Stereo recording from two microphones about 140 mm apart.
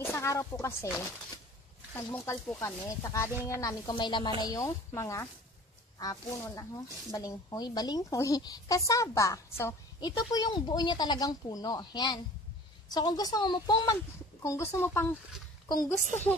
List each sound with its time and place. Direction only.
0.0 s speech: 20° left (ahead or behind)
2.0 s a woman's voice: 15° left (ahead or behind)
14.4 s speech: 20° left (ahead or behind)